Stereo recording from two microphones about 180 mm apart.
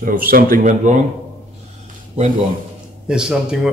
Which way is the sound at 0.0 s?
50° right (ahead or behind).